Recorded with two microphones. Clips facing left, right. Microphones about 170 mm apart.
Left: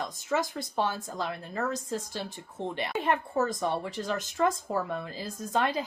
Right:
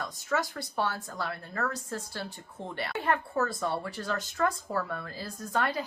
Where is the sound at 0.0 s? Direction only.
20° left (ahead or behind).